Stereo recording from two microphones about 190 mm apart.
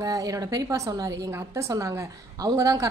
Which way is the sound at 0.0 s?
20° right (ahead or behind).